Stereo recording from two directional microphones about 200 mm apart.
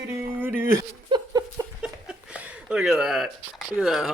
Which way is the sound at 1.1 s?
25° right (ahead or behind).